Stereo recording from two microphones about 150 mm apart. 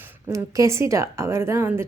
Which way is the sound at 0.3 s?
20° right (ahead or behind).